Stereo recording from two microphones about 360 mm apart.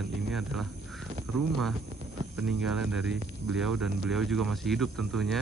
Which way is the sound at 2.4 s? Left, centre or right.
Centre.